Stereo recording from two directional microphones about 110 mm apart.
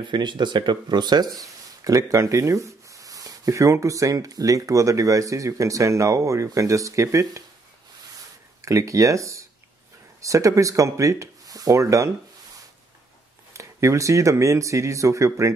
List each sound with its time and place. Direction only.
0.0 s speech: 45° right (ahead or behind); by 7.4 s 30° right (ahead or behind)
8.6 s speech: 30° right (ahead or behind)
13.5 s speech: 30° right (ahead or behind)